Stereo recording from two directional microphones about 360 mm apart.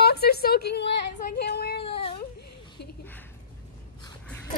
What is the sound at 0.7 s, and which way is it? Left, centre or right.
Speech, left.